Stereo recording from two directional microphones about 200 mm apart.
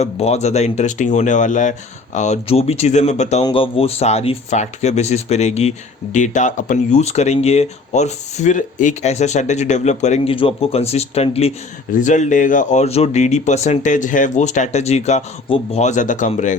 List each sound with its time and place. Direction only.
0.0 s speech: 30° left (ahead or behind)